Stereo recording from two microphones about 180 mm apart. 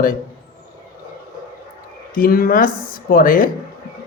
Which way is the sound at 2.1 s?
55° left (ahead or behind).